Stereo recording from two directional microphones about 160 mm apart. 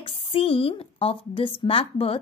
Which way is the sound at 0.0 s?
35° left (ahead or behind).